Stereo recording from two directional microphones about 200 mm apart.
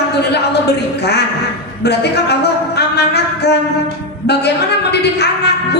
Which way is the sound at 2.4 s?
55° left (ahead or behind).